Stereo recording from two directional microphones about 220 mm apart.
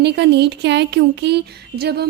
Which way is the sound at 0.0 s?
50° right (ahead or behind).